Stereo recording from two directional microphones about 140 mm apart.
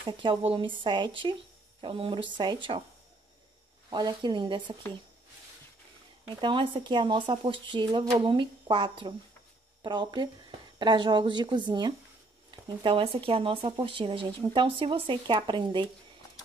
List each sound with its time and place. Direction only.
0.0 s speech: 40° right (ahead or behind)
3.9 s speech: 30° right (ahead or behind)
6.2 s speech: 40° right (ahead or behind)